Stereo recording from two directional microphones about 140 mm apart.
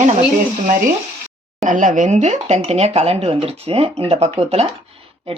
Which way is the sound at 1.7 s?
65° right (ahead or behind).